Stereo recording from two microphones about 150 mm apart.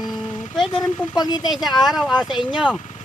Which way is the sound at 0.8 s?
25° left (ahead or behind).